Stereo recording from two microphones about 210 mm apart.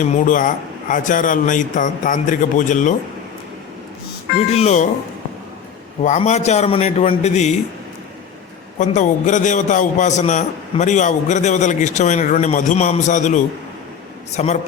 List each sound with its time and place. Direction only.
0.0 s a man's voice: 35° left (ahead or behind)
4.4 s a man's voice: 30° left (ahead or behind)
6.0 s a man's voice: 35° left (ahead or behind)
8.8 s a man's voice: 35° left (ahead or behind)